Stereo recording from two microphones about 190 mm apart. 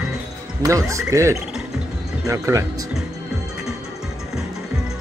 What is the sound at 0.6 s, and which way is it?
Speech, 15° right (ahead or behind).